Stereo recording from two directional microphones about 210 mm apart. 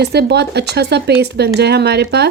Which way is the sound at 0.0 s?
50° right (ahead or behind).